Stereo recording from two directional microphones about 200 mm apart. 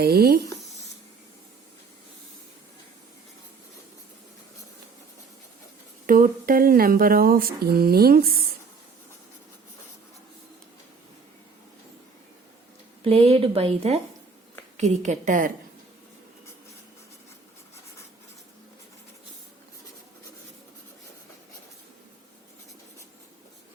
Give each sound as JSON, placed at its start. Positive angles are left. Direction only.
{"t": 0.0, "sound": "speech", "side_deg": -50}
{"t": 6.1, "sound": "speech", "side_deg": -45}
{"t": 13.0, "sound": "a woman's voice", "side_deg": -30}